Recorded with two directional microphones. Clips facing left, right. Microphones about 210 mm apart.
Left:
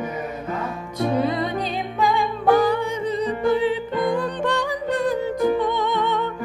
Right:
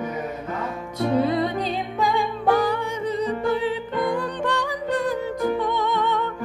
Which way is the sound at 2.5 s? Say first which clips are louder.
Left 5 dB; 20° left (ahead or behind).